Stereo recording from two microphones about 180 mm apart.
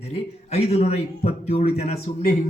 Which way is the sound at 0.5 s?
35° left (ahead or behind).